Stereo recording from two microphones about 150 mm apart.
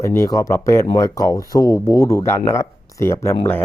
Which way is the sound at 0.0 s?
20° left (ahead or behind).